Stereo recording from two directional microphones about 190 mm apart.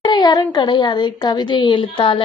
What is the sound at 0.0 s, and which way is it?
A woman's voice, 20° left (ahead or behind).